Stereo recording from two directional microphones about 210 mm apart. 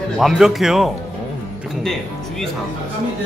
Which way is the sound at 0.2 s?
Centre (ahead or behind).